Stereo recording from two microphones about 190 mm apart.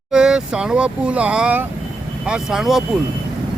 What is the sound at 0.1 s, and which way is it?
Speech, 5° right (ahead or behind).